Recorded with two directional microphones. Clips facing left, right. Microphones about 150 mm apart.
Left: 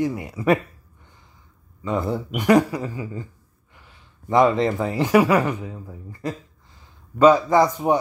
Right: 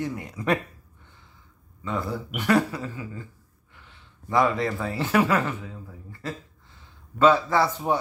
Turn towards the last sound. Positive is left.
turn(degrees=15)  # may be behind; listen again after turning